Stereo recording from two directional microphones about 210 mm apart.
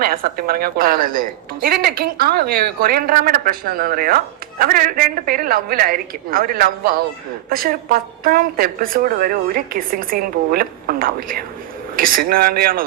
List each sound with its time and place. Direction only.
0.0 s a woman's voice: 45° right (ahead or behind)